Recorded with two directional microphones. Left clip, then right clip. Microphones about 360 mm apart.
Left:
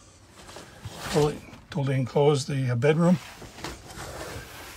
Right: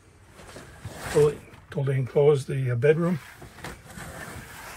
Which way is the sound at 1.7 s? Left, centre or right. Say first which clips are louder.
Left 1 dB; centre.